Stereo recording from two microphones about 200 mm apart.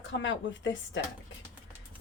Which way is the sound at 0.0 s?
65° left (ahead or behind).